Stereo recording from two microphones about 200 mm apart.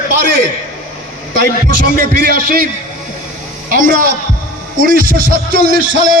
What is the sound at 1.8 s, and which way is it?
Speech, 50° right (ahead or behind).